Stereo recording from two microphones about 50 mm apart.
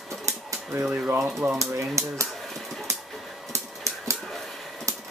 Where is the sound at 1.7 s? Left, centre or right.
Right.